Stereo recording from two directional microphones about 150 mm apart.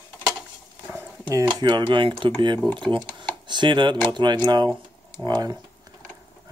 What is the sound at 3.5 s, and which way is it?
Speech, 30° right (ahead or behind).